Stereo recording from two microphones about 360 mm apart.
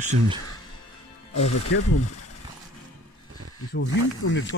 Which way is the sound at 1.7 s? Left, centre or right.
Left.